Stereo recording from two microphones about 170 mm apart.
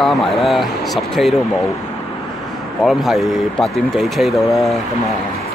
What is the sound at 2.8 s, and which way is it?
Speech, centre (ahead or behind).